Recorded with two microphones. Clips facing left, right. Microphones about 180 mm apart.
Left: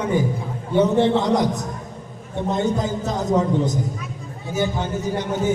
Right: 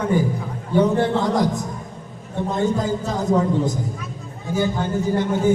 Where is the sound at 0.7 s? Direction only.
20° left (ahead or behind).